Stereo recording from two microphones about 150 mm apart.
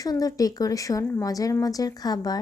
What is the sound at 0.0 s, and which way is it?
Speech, 25° left (ahead or behind).